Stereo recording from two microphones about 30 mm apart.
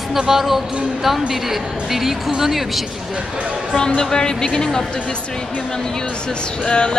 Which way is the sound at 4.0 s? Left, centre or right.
Left.